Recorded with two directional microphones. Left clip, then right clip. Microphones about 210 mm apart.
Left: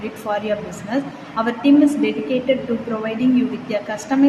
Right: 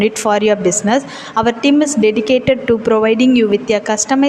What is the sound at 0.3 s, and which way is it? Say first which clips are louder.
A woman's voice: right 8 dB; 50° right (ahead or behind).